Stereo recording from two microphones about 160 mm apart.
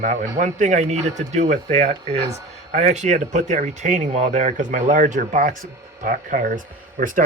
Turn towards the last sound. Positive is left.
turn(degrees=-55)  # may be behind; listen again after turning